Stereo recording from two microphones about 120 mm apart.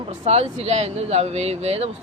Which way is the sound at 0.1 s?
60° right (ahead or behind).